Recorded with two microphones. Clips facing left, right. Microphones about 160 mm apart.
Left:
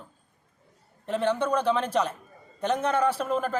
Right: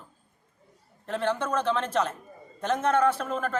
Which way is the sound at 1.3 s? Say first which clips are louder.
Left 3 dB; 30° left (ahead or behind).